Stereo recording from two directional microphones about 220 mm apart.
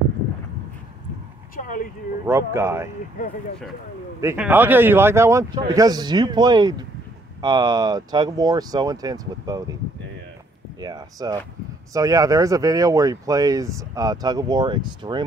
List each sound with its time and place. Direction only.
1.6 s a sound: 40° left (ahead or behind)
2.2 s speech: 10° right (ahead or behind)
4.2 s speech: 10° right (ahead or behind)
10.8 s speech: 15° right (ahead or behind)